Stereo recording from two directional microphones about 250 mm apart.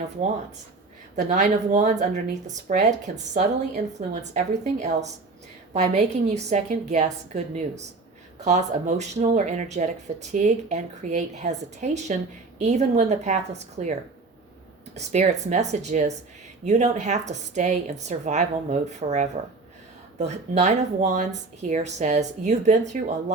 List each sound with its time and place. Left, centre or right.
1.1 s speech: right
4.1 s speech: right
14.9 s speech: right